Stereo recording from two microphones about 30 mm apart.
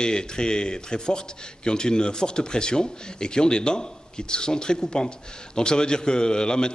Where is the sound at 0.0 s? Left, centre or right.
Left.